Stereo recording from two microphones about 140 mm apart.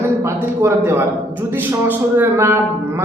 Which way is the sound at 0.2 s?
20° right (ahead or behind).